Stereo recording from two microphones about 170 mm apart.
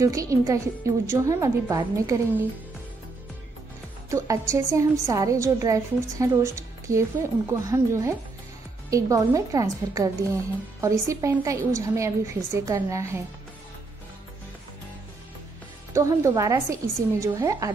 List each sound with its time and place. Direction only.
0.0 s a woman's voice: 20° right (ahead or behind)
4.1 s a woman's voice: 20° right (ahead or behind)
15.9 s a woman's voice: 20° right (ahead or behind)